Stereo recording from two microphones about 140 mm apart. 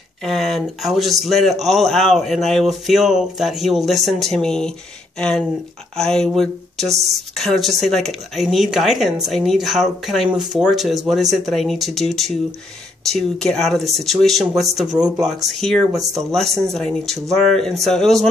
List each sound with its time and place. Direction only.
0.2 s speech: centre (ahead or behind)
5.9 s speech: 5° left (ahead or behind)